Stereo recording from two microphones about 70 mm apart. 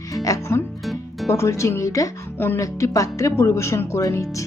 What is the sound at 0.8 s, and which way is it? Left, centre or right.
Music, centre.